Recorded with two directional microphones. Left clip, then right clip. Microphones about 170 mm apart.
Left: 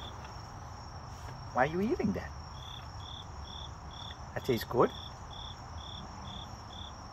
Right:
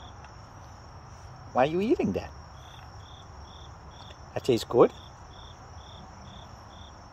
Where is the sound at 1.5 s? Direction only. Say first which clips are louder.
Right 6 dB; 90° right.